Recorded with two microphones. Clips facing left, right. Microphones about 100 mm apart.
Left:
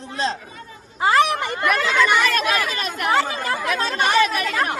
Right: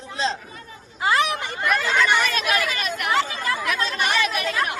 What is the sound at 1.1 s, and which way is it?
Speech, 50° left (ahead or behind).